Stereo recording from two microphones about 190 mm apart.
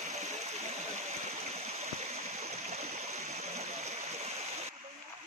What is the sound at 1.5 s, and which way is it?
Stream, 35° right (ahead or behind).